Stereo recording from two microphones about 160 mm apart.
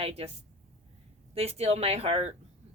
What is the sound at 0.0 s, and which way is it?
Speech, 40° right (ahead or behind).